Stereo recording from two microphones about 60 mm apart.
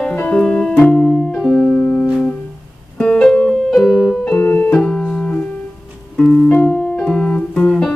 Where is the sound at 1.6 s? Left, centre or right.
Left.